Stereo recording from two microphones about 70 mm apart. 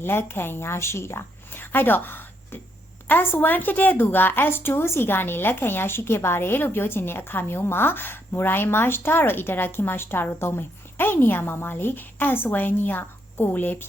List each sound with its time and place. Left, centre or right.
0.0 s a woman's voice: left